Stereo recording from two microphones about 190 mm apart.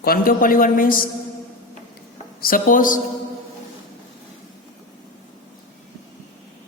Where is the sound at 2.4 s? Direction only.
50° left (ahead or behind).